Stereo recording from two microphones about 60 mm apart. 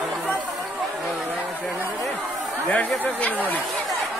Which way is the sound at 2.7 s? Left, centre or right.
Left.